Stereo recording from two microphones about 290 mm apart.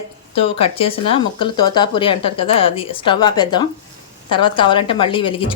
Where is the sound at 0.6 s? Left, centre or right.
Centre.